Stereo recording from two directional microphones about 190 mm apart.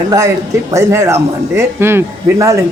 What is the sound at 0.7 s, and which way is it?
A man's voice, 15° right (ahead or behind).